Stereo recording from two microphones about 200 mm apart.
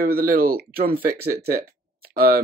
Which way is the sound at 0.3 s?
50° right (ahead or behind).